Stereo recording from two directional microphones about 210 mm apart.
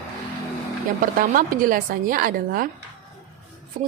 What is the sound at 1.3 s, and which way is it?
Speech, 40° right (ahead or behind).